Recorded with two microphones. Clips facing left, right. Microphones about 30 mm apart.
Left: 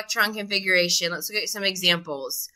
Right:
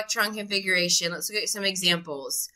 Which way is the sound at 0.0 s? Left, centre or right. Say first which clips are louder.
Left 3 dB; centre.